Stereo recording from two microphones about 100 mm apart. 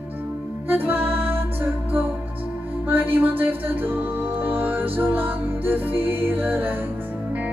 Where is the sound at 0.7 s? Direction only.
20° right (ahead or behind).